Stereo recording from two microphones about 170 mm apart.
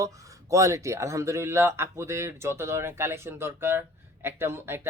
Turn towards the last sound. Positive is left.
turn(degrees=-15)  # may be behind; listen again after turning